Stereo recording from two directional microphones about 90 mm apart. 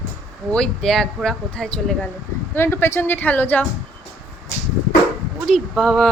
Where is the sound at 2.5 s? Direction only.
25° left (ahead or behind).